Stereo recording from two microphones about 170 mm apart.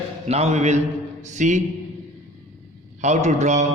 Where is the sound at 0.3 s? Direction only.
40° right (ahead or behind).